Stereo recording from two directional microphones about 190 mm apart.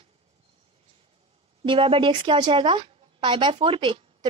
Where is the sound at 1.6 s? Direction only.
30° right (ahead or behind).